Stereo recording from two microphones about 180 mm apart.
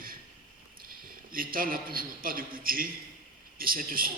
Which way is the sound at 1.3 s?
50° right (ahead or behind).